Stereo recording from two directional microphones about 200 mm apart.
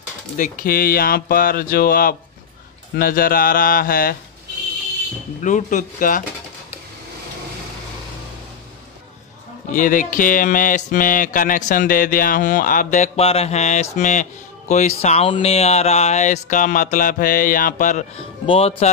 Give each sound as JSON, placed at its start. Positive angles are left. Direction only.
{"t": 0.4, "sound": "speech", "side_deg": 45}
{"t": 5.4, "sound": "speech", "side_deg": 40}
{"t": 9.7, "sound": "speech", "side_deg": 40}